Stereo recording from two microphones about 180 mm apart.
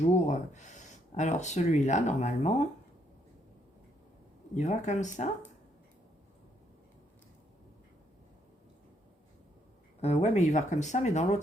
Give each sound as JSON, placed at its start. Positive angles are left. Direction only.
{"t": 0.0, "sound": "speech", "side_deg": 40}
{"t": 4.5, "sound": "speech", "side_deg": 40}
{"t": 10.0, "sound": "speech", "side_deg": 35}